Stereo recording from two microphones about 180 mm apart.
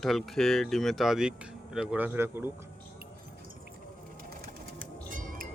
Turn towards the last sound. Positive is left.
turn(degrees=-50)  # may be behind; listen again after turning